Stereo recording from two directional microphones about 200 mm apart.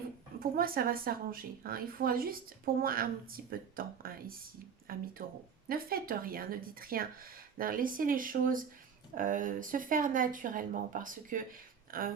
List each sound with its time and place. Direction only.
0.3 s a woman's voice: 45° right (ahead or behind)